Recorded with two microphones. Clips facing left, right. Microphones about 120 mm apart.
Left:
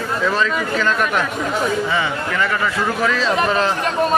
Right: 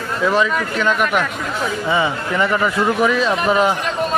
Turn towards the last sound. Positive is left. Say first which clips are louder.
# right 2 dB
turn(degrees=-15)  # may be behind; listen again after turning